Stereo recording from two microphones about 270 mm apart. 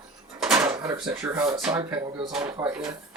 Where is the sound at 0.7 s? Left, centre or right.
Centre.